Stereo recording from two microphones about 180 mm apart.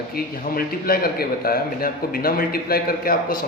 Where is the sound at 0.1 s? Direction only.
55° left (ahead or behind).